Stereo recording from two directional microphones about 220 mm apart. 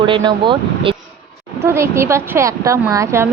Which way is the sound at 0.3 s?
20° right (ahead or behind).